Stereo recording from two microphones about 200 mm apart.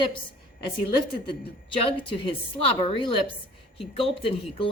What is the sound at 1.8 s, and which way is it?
A woman's voice, 25° left (ahead or behind).